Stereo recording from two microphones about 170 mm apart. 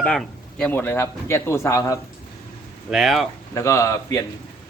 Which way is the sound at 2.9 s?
Centre (ahead or behind).